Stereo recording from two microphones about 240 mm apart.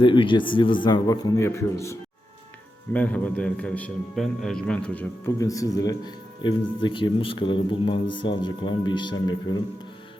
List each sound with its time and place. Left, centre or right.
0.0 s a man's voice: centre